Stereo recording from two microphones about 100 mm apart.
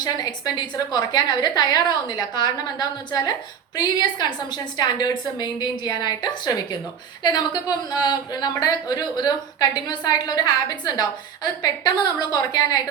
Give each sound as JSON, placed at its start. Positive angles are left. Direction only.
{"t": 0.0, "sound": "a woman's voice", "side_deg": 45}
{"t": 12.3, "sound": "a woman's voice", "side_deg": 40}